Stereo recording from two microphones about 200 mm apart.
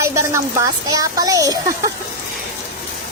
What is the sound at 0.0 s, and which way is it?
Speech, 15° right (ahead or behind).